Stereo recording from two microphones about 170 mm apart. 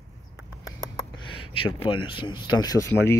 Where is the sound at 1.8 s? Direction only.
30° left (ahead or behind).